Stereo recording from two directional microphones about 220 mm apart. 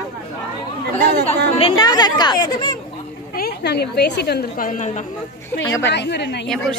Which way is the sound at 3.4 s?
45° left (ahead or behind).